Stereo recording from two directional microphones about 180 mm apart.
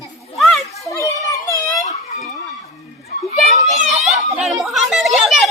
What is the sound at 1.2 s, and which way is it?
Children playing, 20° left (ahead or behind).